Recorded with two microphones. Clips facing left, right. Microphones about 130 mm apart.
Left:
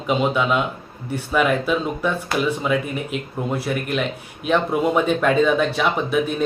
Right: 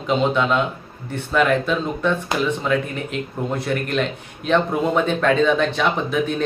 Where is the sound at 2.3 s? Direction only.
20° right (ahead or behind).